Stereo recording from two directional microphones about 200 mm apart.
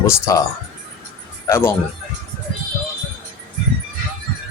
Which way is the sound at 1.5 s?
15° left (ahead or behind).